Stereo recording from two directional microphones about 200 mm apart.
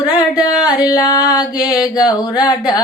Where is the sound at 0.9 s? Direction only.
20° left (ahead or behind).